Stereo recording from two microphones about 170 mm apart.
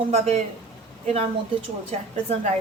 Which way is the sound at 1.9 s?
40° right (ahead or behind).